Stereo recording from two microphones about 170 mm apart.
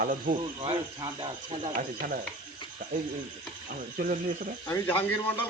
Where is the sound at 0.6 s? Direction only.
25° right (ahead or behind).